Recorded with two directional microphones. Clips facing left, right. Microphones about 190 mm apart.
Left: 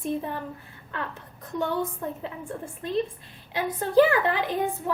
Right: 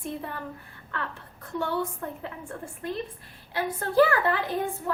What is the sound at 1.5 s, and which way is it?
Speech, 20° left (ahead or behind).